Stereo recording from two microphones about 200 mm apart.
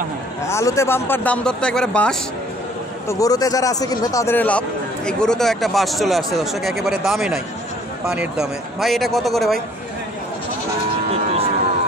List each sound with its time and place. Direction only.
0.4 s speech: 15° left (ahead or behind)
3.1 s speech: 15° left (ahead or behind); by 9.6 s centre (ahead or behind)
11.1 s a sound: 30° right (ahead or behind)